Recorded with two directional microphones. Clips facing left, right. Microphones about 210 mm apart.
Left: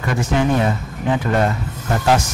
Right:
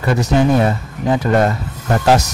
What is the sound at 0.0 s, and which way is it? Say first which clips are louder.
Speech: right 4 dB; 35° right (ahead or behind).